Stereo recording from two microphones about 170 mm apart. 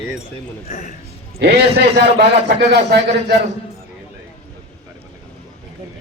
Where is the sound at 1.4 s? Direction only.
75° right (ahead or behind).